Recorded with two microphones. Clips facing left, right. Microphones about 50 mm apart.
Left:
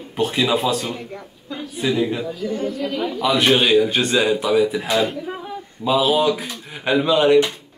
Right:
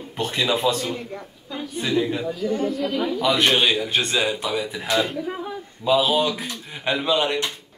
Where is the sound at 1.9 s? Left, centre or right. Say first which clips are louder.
Left 2 dB; centre.